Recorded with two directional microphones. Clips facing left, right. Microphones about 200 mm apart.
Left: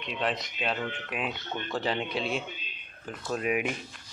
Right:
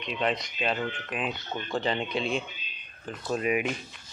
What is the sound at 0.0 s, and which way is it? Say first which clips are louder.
Speech: right 2 dB; centre (ahead or behind).